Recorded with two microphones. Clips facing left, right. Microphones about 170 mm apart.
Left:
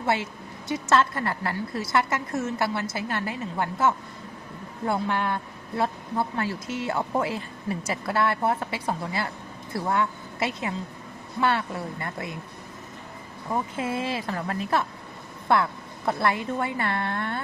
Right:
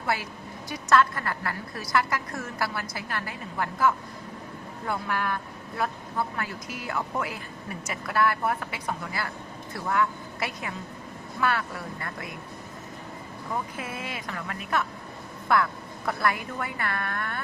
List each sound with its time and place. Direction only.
0.0 s a woman's voice: 25° left (ahead or behind)
13.5 s speech: 25° left (ahead or behind)